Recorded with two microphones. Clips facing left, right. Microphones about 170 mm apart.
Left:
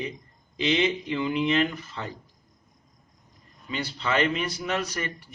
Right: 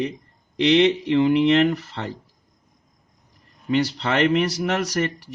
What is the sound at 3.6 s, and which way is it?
Speech, 70° right (ahead or behind).